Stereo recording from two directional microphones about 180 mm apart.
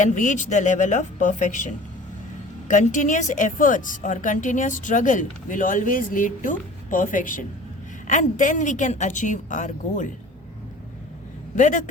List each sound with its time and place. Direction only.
0.0 s a woman's voice: 45° left (ahead or behind)
11.5 s a woman's voice: 45° left (ahead or behind)